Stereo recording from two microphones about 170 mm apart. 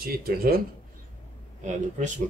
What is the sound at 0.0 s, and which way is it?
Speech, 60° right (ahead or behind).